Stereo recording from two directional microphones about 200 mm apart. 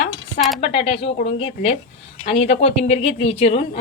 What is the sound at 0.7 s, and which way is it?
A woman's voice, 30° left (ahead or behind).